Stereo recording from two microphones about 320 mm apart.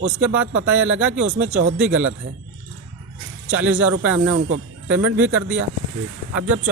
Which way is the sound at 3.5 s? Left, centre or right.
Centre.